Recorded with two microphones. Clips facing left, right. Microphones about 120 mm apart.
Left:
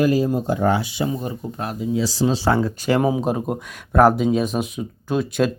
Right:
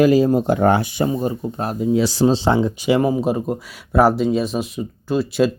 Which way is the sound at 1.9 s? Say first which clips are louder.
Right 4 dB; 65° right (ahead or behind).